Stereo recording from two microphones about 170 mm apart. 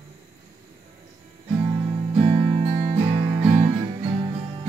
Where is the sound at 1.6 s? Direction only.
30° right (ahead or behind).